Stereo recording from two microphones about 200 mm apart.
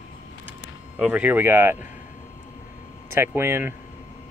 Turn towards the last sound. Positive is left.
turn(degrees=-10)  # may be behind; listen again after turning